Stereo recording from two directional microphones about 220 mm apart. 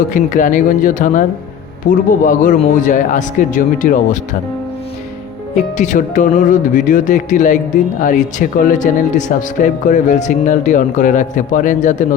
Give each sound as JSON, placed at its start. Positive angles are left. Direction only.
{"t": 0.1, "sound": "speech", "side_deg": 35}
{"t": 5.5, "sound": "speech", "side_deg": 35}